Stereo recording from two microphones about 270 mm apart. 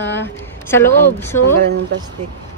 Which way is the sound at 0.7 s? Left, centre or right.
Centre.